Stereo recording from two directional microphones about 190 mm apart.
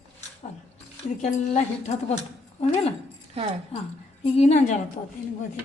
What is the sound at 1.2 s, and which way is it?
A woman's voice, 40° left (ahead or behind).